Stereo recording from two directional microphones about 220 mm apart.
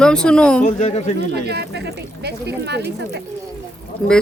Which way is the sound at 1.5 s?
50° right (ahead or behind).